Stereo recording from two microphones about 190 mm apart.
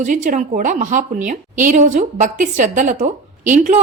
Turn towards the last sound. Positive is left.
turn(degrees=-40)  # may be behind; listen again after turning